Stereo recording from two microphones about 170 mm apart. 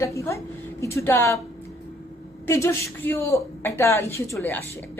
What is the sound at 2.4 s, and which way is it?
A woman's voice, 15° left (ahead or behind).